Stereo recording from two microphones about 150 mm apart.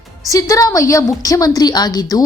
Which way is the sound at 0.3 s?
20° left (ahead or behind).